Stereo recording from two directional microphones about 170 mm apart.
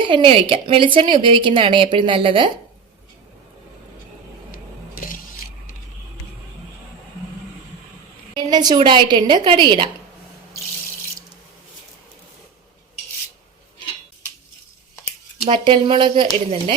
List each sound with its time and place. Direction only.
0.0 s a woman's voice: 30° right (ahead or behind)
8.4 s a woman's voice: 25° right (ahead or behind)
15.4 s a woman's voice: 30° right (ahead or behind)